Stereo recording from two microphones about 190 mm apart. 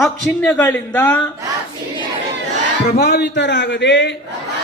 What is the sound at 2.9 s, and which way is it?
A man's voice, 60° left (ahead or behind).